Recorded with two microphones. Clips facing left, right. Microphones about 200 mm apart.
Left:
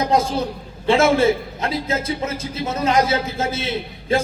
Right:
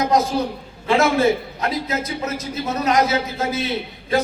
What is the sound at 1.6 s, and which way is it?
A man's voice, 25° left (ahead or behind).